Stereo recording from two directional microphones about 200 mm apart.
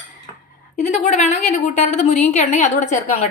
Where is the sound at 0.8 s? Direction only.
35° left (ahead or behind).